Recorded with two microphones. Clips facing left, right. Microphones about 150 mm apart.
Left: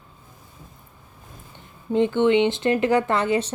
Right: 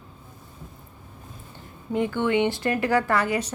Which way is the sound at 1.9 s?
25° left (ahead or behind).